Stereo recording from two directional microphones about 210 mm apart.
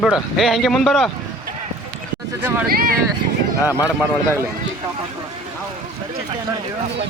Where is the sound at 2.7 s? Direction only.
45° right (ahead or behind).